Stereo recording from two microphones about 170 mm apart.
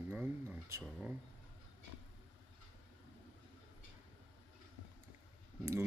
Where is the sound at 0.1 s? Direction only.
10° right (ahead or behind).